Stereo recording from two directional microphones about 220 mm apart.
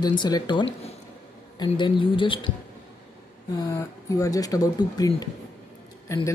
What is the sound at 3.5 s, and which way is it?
Speech, 15° left (ahead or behind).